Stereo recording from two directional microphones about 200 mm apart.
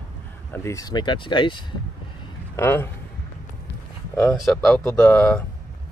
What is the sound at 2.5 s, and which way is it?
Speech, 10° left (ahead or behind).